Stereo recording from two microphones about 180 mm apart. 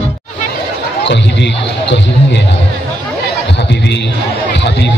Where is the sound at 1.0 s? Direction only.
75° left (ahead or behind).